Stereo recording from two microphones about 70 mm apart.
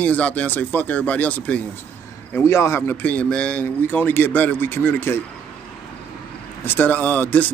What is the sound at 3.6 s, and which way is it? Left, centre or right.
Speech, left.